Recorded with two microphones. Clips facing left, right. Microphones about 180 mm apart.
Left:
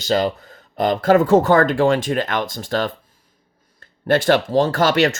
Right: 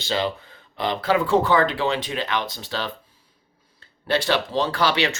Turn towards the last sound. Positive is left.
turn(degrees=45)  # may be behind; listen again after turning